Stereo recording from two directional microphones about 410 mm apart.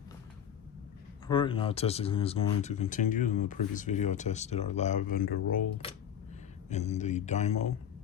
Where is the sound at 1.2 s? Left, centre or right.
Centre.